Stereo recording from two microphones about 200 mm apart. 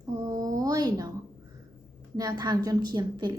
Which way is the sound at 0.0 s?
20° right (ahead or behind).